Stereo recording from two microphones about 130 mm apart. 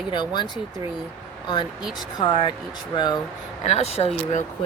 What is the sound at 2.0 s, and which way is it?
Speech, 35° left (ahead or behind).